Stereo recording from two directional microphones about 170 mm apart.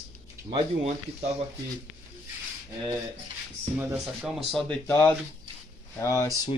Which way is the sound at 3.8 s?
5° right (ahead or behind).